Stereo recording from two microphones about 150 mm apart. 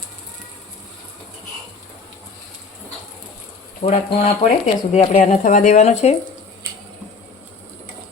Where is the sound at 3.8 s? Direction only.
45° left (ahead or behind).